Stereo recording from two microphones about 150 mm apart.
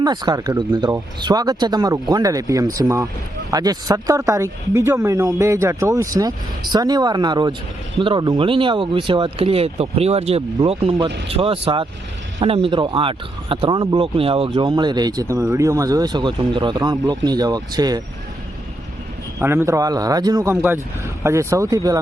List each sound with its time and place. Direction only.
0.0 s speech: 30° right (ahead or behind)
9.4 s speech: 40° right (ahead or behind)
19.4 s speech: 15° right (ahead or behind)